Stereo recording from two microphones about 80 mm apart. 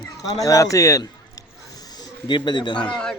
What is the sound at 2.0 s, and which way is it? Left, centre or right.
Speech, left.